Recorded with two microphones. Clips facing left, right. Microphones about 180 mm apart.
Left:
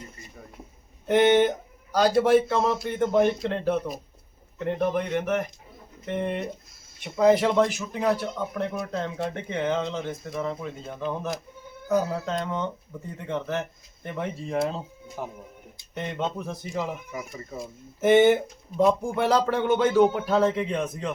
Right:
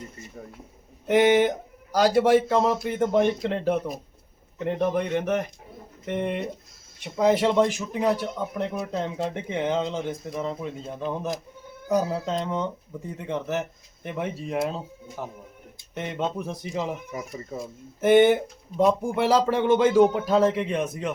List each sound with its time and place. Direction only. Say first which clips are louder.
1.0 s speech: even; 10° right (ahead or behind)
15.2 s speech: left 1 dB; 10° left (ahead or behind)
16.0 s speech: right 1 dB; 5° right (ahead or behind)
18.0 s speech: right 1 dB; centre (ahead or behind)